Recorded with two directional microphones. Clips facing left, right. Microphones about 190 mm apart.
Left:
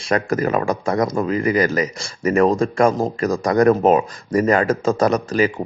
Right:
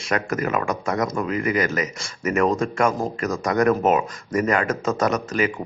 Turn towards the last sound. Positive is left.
turn(degrees=30)  # may be behind; listen again after turning